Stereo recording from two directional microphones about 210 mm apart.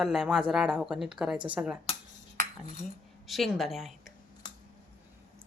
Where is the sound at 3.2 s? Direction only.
Centre (ahead or behind).